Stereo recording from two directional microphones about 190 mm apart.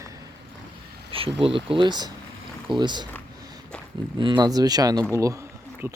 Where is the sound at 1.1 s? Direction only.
30° right (ahead or behind).